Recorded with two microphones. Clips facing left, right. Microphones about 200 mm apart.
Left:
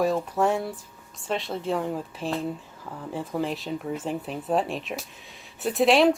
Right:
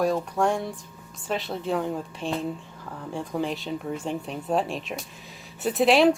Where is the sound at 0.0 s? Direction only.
5° left (ahead or behind).